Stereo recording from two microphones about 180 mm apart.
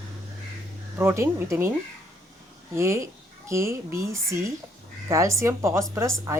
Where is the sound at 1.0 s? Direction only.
15° right (ahead or behind).